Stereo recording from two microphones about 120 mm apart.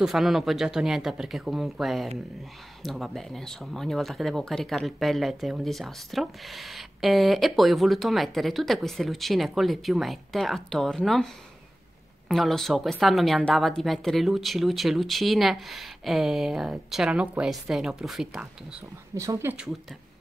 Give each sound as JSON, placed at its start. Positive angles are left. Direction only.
{"t": 0.0, "sound": "speech", "side_deg": 0}
{"t": 12.3, "sound": "speech", "side_deg": 0}
{"t": 19.1, "sound": "speech", "side_deg": -25}